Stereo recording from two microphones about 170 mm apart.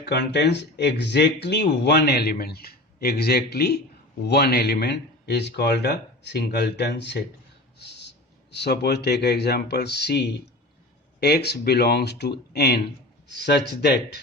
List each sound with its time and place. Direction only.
0.0 s speech: 80° left